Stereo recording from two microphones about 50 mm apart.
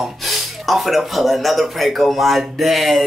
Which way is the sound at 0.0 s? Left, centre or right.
Centre.